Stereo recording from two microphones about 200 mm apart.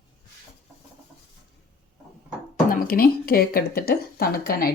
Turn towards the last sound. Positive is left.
turn(degrees=50)  # may be behind; listen again after turning